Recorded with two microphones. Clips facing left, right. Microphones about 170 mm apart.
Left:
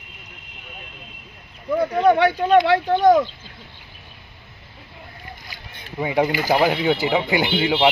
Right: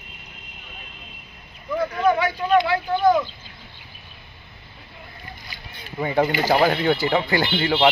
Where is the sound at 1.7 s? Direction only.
30° left (ahead or behind).